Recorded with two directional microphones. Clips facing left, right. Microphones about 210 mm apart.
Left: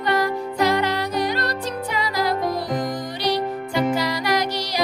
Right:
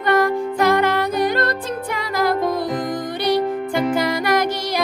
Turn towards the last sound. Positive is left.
turn(degrees=-50)  # may be behind; listen again after turning